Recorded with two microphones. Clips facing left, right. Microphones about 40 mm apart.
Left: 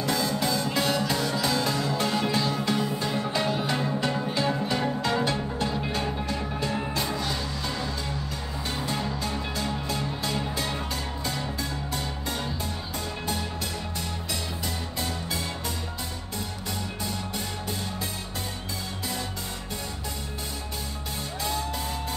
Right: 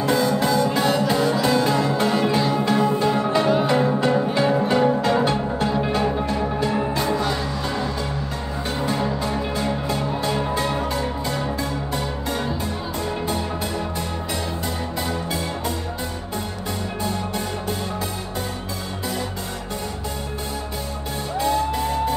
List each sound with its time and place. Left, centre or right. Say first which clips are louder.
0.0 s music: right 7 dB; right
1.0 s music: right 7 dB; right
2.1 s music: right 6 dB; centre
3.7 s music: right 9 dB; right
4.0 s music: right 7 dB; right
4.6 s music: right 9 dB; right; by 5.9 s centre
5.9 s music: right 8 dB; right
8.8 s music: right 8 dB; right